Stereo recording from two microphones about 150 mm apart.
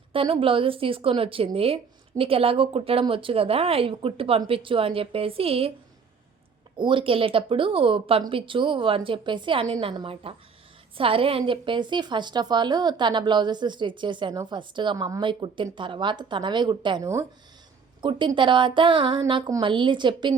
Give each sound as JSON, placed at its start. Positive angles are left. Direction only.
{"t": 0.1, "sound": "a woman's voice", "side_deg": -35}
{"t": 6.7, "sound": "a woman's voice", "side_deg": -35}
{"t": 17.0, "sound": "speech", "side_deg": -20}
{"t": 18.0, "sound": "a woman's voice", "side_deg": -35}